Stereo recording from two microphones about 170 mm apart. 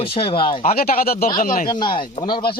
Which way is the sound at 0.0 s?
35° left (ahead or behind).